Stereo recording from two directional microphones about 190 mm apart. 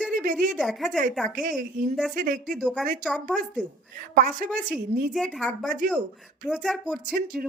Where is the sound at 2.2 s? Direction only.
45° right (ahead or behind).